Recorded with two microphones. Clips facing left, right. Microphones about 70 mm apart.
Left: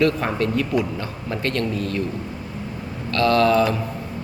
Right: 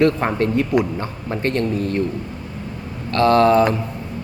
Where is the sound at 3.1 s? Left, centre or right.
Right.